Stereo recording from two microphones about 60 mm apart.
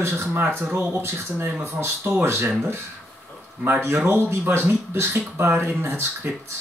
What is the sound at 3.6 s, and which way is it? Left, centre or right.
Speech, right.